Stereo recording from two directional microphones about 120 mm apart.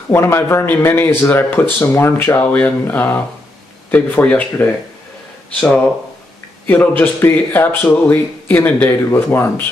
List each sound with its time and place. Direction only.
0.1 s speech: 20° left (ahead or behind)
6.6 s speech: 15° left (ahead or behind)